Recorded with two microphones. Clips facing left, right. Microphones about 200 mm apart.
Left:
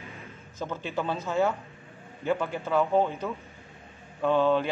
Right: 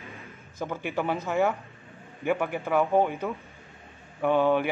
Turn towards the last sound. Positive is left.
turn(degrees=-15)  # may be behind; listen again after turning